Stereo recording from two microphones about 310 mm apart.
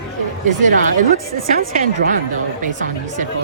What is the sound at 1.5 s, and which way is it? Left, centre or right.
Speech, right.